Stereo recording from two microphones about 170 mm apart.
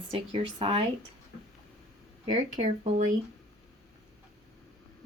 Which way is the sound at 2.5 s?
45° right (ahead or behind).